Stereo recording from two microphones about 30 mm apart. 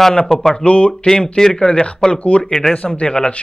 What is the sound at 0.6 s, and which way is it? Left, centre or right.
Speech, left.